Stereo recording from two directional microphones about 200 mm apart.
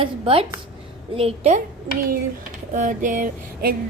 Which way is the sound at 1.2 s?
30° right (ahead or behind).